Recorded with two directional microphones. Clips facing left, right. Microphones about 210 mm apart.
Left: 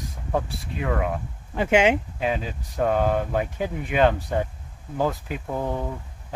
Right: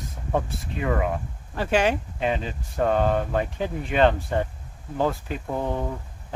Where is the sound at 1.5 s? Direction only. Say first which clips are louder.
Left 3 dB; 20° left (ahead or behind).